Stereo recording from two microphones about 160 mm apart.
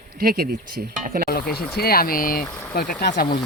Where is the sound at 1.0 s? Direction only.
65° right (ahead or behind).